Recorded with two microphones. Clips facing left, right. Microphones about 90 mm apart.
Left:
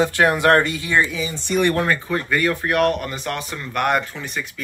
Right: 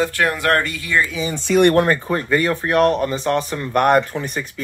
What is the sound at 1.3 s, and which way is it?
Speech, 80° right.